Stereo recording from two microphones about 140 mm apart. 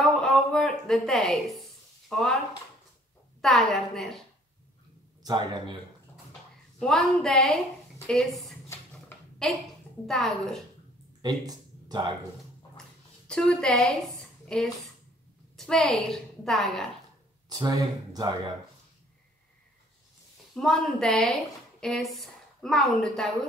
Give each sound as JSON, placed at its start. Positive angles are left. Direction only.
{"t": 0.2, "sound": "a sound", "side_deg": 5}
{"t": 2.0, "sound": "speech", "side_deg": 5}
{"t": 3.3, "sound": "a woman's voice", "side_deg": 0}
{"t": 5.2, "sound": "speech", "side_deg": -30}
{"t": 6.8, "sound": "a woman's voice", "side_deg": 5}
{"t": 8.9, "sound": "a sound", "side_deg": 5}
{"t": 10.0, "sound": "a woman's voice", "side_deg": 0}
{"t": 11.2, "sound": "speech", "side_deg": -30}
{"t": 13.3, "sound": "a woman's voice", "side_deg": 5}
{"t": 17.5, "sound": "speech", "side_deg": -25}
{"t": 20.5, "sound": "a woman's voice", "side_deg": 5}